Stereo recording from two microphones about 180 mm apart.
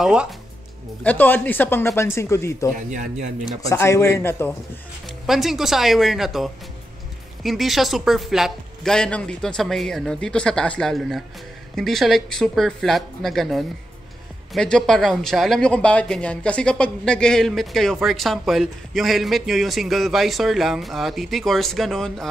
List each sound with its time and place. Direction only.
0.0 s speech: 5° right (ahead or behind)
1.0 s speech: 10° left (ahead or behind)
2.9 s speech: 45° right (ahead or behind)
3.6 s speech: 15° left (ahead or behind)
5.0 s speech: centre (ahead or behind)